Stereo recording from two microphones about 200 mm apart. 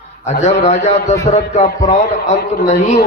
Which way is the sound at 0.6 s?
35° left (ahead or behind).